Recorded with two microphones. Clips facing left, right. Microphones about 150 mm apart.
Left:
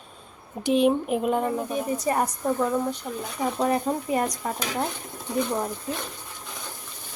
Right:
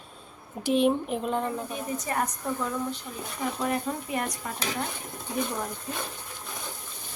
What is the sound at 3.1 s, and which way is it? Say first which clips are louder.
Speech: left 6 dB; 55° left (ahead or behind).